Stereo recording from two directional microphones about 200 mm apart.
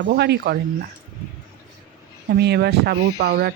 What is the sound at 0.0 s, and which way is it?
Speech, 55° right (ahead or behind).